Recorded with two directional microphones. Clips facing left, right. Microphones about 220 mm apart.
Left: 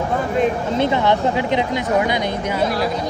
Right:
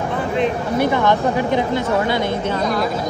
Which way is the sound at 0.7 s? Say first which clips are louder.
Right 2 dB; 20° left (ahead or behind).